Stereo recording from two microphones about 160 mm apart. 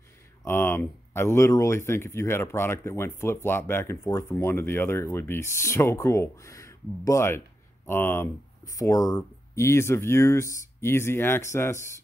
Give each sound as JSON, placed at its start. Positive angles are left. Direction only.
{"t": 0.5, "sound": "speech", "side_deg": 15}